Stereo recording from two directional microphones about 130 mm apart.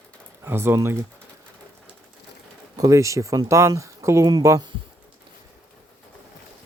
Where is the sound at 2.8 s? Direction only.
25° right (ahead or behind).